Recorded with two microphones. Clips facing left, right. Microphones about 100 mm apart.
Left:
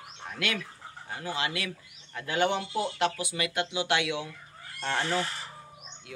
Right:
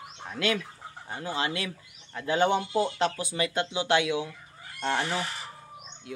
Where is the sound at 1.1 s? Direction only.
25° right (ahead or behind).